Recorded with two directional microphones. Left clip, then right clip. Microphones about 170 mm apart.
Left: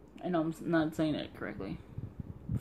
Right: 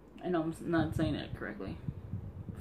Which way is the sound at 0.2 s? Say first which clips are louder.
Left 1 dB; 45° left (ahead or behind).